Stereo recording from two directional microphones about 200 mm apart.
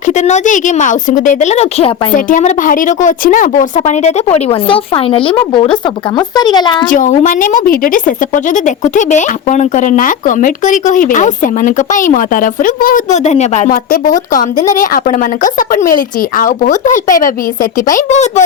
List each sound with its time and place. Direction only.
0.1 s a woman's voice: 35° left (ahead or behind)
6.8 s a woman's voice: 40° left (ahead or behind)